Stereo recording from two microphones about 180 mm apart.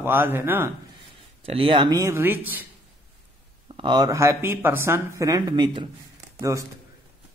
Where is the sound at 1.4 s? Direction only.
30° right (ahead or behind); by 2.7 s 10° right (ahead or behind).